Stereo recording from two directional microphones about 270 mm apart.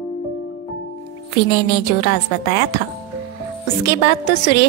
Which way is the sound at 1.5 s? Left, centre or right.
Left.